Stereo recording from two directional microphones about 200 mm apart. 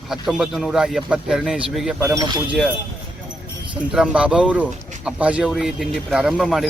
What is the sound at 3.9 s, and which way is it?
Speech, 5° right (ahead or behind).